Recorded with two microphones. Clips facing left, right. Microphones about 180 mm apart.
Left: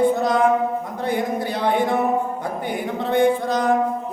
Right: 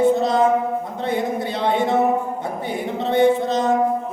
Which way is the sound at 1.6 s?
25° right (ahead or behind).